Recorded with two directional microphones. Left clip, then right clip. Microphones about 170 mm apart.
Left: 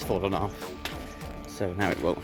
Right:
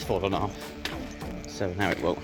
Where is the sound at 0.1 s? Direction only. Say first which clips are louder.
Right 1 dB; 30° left (ahead or behind).